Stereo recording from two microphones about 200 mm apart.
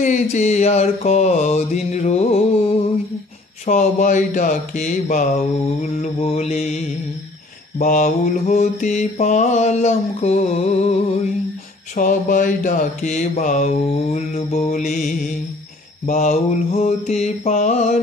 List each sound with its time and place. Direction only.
0.0 s mantra: 35° left (ahead or behind)
7.8 s mantra: 40° left (ahead or behind)